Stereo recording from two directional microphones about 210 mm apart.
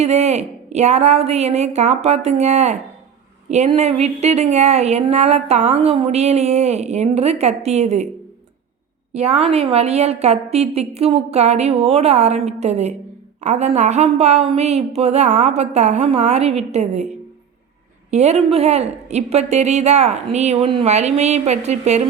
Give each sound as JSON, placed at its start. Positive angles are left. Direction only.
{"t": 0.0, "sound": "speech", "side_deg": -30}
{"t": 9.1, "sound": "speech", "side_deg": -30}
{"t": 18.1, "sound": "speech", "side_deg": -30}